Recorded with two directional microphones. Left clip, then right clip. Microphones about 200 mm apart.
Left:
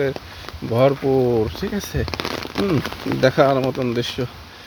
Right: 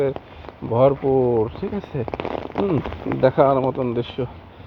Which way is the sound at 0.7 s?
45° left (ahead or behind).